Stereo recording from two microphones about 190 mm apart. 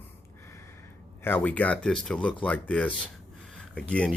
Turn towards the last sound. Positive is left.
turn(degrees=5)  # may be behind; listen again after turning